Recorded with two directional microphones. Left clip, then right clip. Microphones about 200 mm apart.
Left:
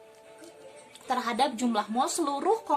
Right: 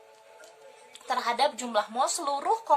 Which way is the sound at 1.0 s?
15° right (ahead or behind).